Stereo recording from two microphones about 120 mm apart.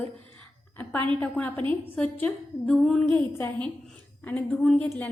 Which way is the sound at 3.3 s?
15° left (ahead or behind).